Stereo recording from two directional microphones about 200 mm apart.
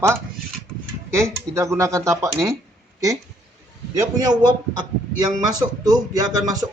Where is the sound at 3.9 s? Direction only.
20° right (ahead or behind).